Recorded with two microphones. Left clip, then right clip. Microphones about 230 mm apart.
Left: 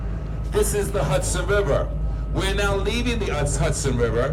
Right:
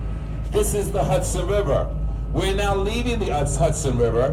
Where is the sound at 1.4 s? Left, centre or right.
Right.